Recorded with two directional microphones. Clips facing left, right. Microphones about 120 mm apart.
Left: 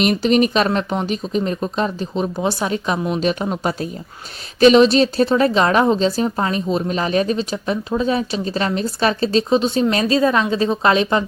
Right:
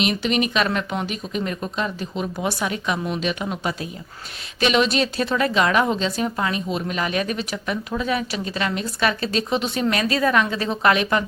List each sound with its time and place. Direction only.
0.0 s a woman's voice: 40° left (ahead or behind)